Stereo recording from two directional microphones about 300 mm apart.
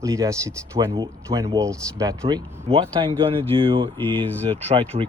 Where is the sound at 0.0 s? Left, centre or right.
Centre.